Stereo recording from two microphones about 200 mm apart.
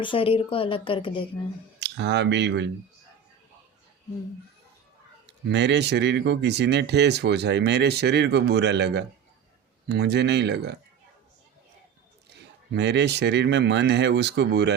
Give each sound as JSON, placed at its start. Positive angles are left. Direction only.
{"t": 0.0, "sound": "a woman's voice", "side_deg": 25}
{"t": 1.8, "sound": "speech", "side_deg": -60}
{"t": 5.2, "sound": "speech", "side_deg": -60}
{"t": 12.3, "sound": "speech", "side_deg": -60}